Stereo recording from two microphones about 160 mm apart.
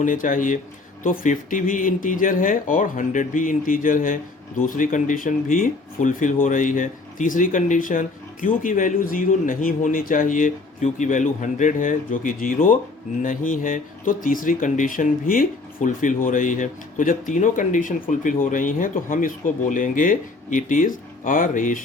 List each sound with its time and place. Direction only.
0.0 s speech: 55° left (ahead or behind)